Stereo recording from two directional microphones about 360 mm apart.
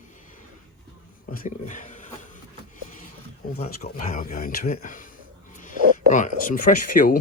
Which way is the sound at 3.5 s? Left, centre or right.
Centre.